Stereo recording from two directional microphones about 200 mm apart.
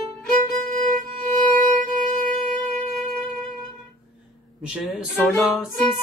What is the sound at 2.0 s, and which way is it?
Music, 35° right (ahead or behind).